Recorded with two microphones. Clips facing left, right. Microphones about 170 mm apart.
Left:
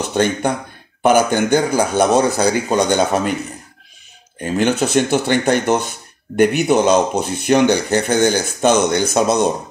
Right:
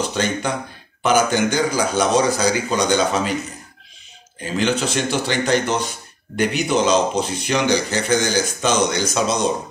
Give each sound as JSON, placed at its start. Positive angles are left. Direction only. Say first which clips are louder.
{"t": 0.1, "sound": "a man's voice", "louder": "left 5 dB", "side_deg": 55}
{"t": 4.4, "sound": "speech", "louder": "left 4 dB", "side_deg": 55}